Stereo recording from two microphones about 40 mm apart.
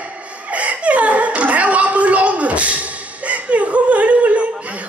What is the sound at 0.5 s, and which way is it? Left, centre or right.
Chuckle, right.